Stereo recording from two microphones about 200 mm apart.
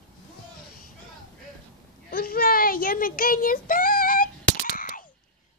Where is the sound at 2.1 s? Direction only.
50° left (ahead or behind).